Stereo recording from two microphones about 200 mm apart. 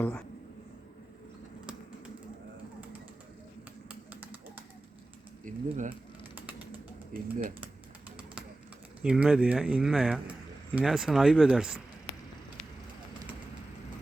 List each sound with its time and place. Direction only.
0.0 s speech: 10° left (ahead or behind)
3.8 s a sound: 10° right (ahead or behind)
5.5 s speech: 40° right (ahead or behind)
6.3 s typing: 10° right (ahead or behind)
7.1 s speech: 45° right (ahead or behind)
9.0 s speech: 5° right (ahead or behind)